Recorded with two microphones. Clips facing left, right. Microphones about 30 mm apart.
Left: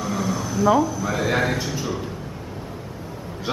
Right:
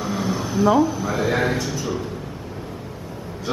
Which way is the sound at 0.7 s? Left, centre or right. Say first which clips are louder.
Right 1 dB; centre.